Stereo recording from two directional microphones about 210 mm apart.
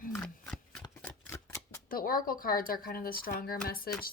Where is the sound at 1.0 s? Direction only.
10° left (ahead or behind).